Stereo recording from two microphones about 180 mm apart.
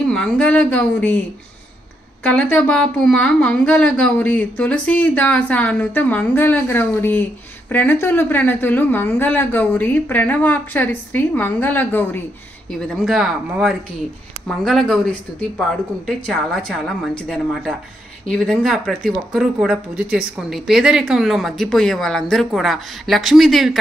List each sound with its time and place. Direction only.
0.0 s speech: 5° left (ahead or behind)
2.2 s speech: 5° left (ahead or behind)
16.6 s speech: centre (ahead or behind)